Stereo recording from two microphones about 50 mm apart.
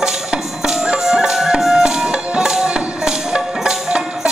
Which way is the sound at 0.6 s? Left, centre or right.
Centre.